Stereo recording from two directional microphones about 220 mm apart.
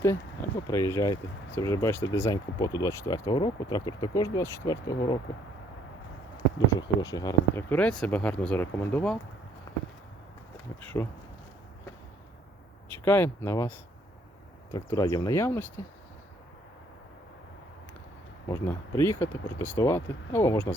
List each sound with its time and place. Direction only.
0.7 s speech: 15° left (ahead or behind)
6.3 s speech: 20° left (ahead or behind)
9.7 s a sound: 20° left (ahead or behind)
10.8 s speech: 10° left (ahead or behind)
13.1 s speech: 10° left (ahead or behind)
18.4 s speech: 15° left (ahead or behind)